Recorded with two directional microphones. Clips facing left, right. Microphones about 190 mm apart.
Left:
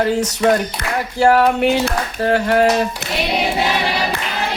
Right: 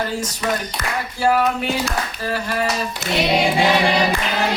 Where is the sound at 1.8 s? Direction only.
65° left (ahead or behind).